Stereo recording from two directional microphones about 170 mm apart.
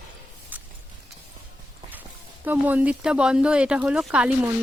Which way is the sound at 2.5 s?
10° right (ahead or behind).